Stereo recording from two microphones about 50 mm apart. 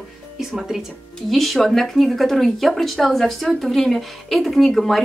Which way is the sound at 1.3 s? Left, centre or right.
Centre.